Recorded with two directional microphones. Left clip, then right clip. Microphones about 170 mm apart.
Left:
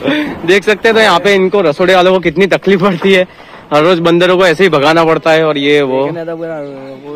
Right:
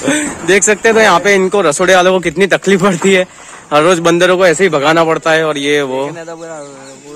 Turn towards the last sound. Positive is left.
turn(degrees=-15)  # may be behind; listen again after turning